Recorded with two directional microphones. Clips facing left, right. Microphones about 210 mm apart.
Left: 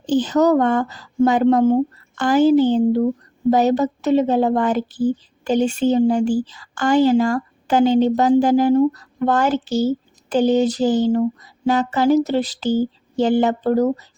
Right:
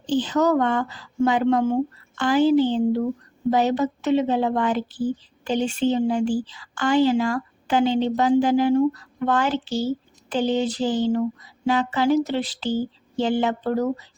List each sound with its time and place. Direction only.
0.0 s a woman's voice: 45° left (ahead or behind)